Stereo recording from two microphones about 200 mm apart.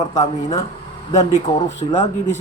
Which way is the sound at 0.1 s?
35° left (ahead or behind).